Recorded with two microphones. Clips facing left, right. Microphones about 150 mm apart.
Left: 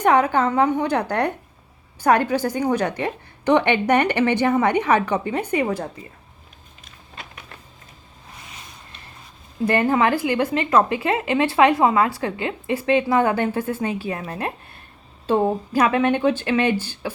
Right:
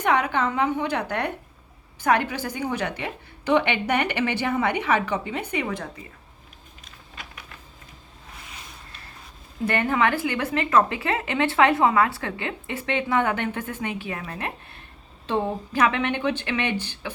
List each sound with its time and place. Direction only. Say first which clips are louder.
0.0 s a woman's voice: left 5 dB; 45° left (ahead or behind)
5.5 s a woman's voice: left 7 dB; 40° left (ahead or behind)
9.6 s a woman's voice: left 4 dB; 35° left (ahead or behind)
16.7 s speech: left 3 dB; 20° right (ahead or behind)